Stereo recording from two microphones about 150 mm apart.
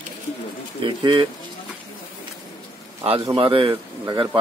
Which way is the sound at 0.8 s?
35° right (ahead or behind).